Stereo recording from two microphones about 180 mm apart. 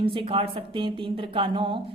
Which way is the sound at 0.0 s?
30° right (ahead or behind).